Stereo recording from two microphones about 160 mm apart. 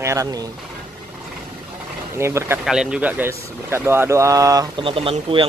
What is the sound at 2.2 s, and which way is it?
Speech, 15° right (ahead or behind).